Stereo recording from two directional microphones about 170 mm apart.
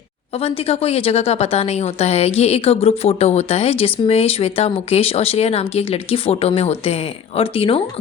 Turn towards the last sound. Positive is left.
turn(degrees=35)  # may be behind; listen again after turning